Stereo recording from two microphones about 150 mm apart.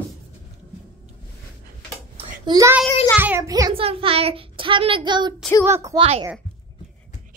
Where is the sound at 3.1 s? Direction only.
15° right (ahead or behind).